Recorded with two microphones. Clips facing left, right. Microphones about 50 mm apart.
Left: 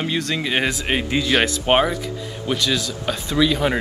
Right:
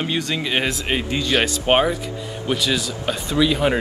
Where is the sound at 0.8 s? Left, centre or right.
Centre.